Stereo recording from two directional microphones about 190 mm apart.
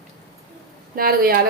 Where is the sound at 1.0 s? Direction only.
50° right (ahead or behind).